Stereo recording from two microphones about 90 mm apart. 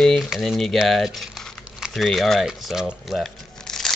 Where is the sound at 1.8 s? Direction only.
Centre (ahead or behind).